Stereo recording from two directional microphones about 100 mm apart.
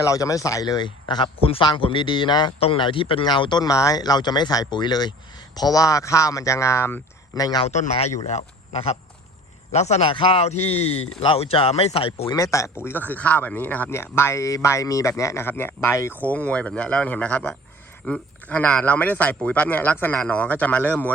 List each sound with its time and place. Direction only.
0.0 s speech: 35° left (ahead or behind); by 1.6 s 70° left (ahead or behind)
1.6 s speech: 55° left (ahead or behind)
2.6 s a man's voice: 65° left (ahead or behind)
3.2 s speech: 50° left (ahead or behind); by 7.0 s 25° left (ahead or behind)
7.3 s speech: 40° left (ahead or behind)
7.6 s a man's voice: 85° left
10.2 s a man's voice: 55° left (ahead or behind)
10.4 s a man's voice: 90° left
11.2 s speech: 75° left (ahead or behind)
12.3 s speech: 35° left (ahead or behind)
16.2 s a man's voice: 15° left (ahead or behind)